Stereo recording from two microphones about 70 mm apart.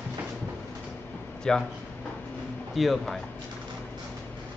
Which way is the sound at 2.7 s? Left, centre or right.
Centre.